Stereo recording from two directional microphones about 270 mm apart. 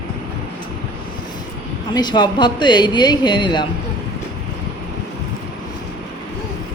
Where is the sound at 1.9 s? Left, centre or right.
Centre.